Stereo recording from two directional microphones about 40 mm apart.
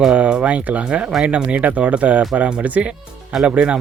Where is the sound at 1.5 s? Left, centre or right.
Right.